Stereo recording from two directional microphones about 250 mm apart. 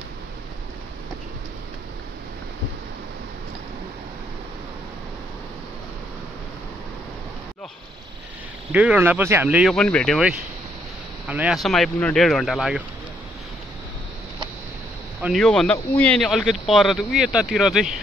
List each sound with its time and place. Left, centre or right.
8.7 s speech: centre
15.2 s speech: centre